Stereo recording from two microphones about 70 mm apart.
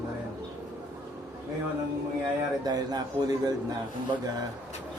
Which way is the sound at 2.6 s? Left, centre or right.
Right.